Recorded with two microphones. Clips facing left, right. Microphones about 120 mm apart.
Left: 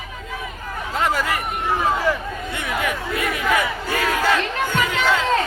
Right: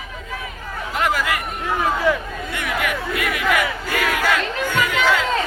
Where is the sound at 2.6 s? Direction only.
30° left (ahead or behind).